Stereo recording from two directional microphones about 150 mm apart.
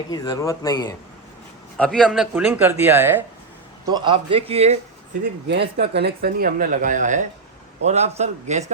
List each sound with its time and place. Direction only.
0.1 s speech: 25° left (ahead or behind)
1.8 s a man's voice: 5° left (ahead or behind)
2.3 s speech: 15° right (ahead or behind)
3.8 s a man's voice: 30° right (ahead or behind)
5.7 s a man's voice: 90° right; by 8.6 s 50° right (ahead or behind)